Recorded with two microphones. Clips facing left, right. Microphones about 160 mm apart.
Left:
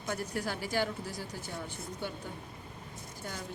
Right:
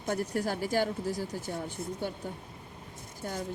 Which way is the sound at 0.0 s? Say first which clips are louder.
Right 5 dB; 40° right (ahead or behind).